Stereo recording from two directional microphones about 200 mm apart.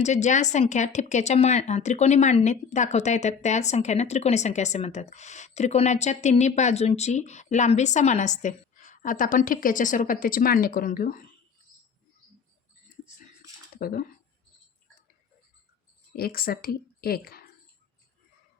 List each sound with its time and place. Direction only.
0.0 s speech: 35° left (ahead or behind)
13.7 s speech: 45° left (ahead or behind)
16.1 s speech: 50° left (ahead or behind)